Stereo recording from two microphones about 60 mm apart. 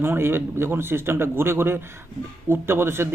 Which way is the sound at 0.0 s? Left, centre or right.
Right.